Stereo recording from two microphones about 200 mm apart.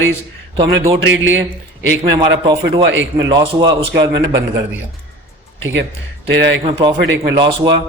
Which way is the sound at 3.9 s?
60° right (ahead or behind).